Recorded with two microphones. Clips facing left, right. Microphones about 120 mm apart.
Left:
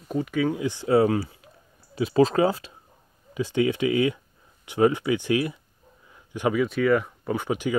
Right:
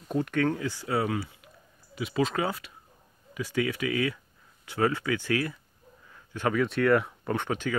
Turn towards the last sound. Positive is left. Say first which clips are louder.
# left 3 dB
turn(degrees=10)  # may be behind; listen again after turning